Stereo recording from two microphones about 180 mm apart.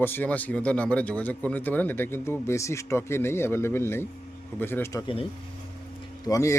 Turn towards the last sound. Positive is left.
turn(degrees=20)  # may be behind; listen again after turning